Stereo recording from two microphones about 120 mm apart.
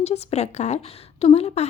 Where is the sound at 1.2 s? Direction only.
55° left (ahead or behind).